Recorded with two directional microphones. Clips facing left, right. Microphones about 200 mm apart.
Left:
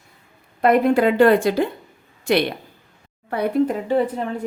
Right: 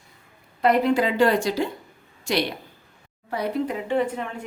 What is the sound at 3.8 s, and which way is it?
Speech, 35° left (ahead or behind).